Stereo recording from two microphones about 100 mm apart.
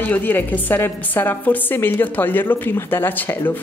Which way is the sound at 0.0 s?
15° left (ahead or behind).